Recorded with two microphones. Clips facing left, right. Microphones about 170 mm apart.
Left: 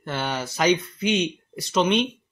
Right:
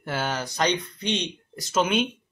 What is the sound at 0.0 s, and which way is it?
A man's voice, 5° right (ahead or behind).